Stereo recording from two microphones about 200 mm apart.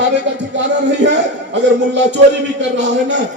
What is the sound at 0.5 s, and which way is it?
A man's voice, 60° right (ahead or behind).